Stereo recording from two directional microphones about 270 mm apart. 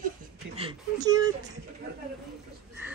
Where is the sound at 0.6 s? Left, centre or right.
Centre.